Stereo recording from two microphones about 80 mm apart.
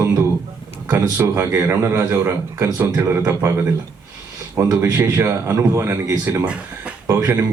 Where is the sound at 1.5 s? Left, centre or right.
Right.